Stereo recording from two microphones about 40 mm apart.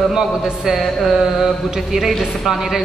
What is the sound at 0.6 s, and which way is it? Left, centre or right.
A man's voice, centre.